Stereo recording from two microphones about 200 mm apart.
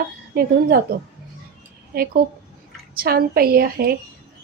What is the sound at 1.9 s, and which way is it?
A woman's voice, 50° right (ahead or behind).